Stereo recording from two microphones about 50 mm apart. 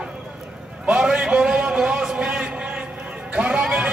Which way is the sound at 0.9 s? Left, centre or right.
Right.